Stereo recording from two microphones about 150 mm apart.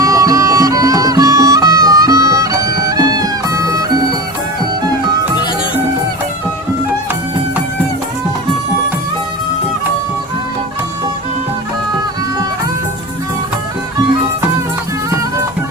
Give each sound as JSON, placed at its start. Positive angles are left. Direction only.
{"t": 0.0, "sound": "music", "side_deg": -20}